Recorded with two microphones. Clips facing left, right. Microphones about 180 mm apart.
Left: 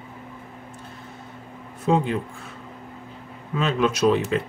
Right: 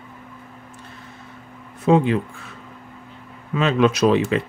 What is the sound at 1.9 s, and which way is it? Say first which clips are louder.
Speech: right 5 dB; 80° right.